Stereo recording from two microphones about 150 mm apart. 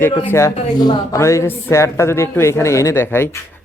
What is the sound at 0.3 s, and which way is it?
A man's voice, 20° left (ahead or behind).